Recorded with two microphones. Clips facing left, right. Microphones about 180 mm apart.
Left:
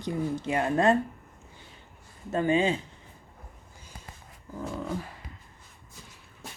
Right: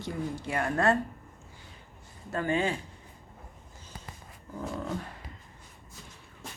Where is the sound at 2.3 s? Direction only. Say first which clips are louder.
Left 4 dB; 20° left (ahead or behind).